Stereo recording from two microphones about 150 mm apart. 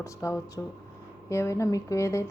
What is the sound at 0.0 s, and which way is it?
A woman's voice, 20° left (ahead or behind).